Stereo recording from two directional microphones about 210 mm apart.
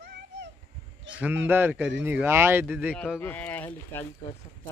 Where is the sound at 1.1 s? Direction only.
5° right (ahead or behind).